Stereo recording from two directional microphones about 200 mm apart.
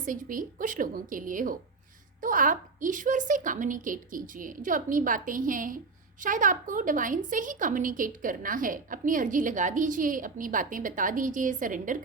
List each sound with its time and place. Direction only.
0.0 s a woman's voice: 40° right (ahead or behind)